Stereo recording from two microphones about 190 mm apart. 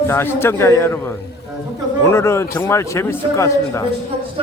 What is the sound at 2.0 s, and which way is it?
Speech, 15° left (ahead or behind).